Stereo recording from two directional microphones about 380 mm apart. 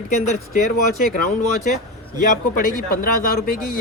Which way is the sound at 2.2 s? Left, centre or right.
Left.